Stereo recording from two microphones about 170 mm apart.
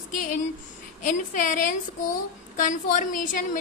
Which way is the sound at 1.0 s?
50° left (ahead or behind).